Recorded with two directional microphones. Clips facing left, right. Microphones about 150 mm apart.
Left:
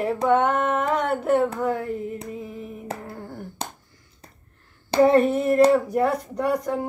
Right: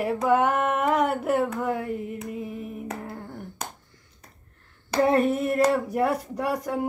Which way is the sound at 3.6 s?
30° left (ahead or behind).